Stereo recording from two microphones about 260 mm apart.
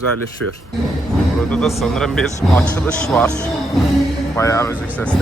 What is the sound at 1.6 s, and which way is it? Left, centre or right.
A man's voice, centre.